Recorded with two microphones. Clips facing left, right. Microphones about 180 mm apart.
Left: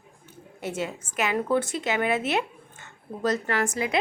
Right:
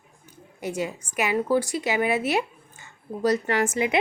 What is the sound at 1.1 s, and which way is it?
A woman's voice, 10° right (ahead or behind).